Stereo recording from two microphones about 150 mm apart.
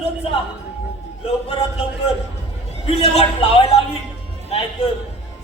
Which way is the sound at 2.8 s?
40° left (ahead or behind).